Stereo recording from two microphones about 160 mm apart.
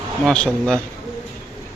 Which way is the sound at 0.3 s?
5° left (ahead or behind).